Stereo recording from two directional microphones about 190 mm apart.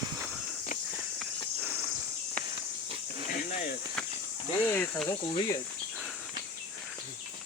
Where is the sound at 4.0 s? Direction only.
5° left (ahead or behind).